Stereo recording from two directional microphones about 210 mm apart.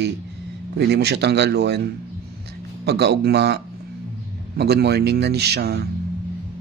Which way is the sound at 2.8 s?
50° right (ahead or behind).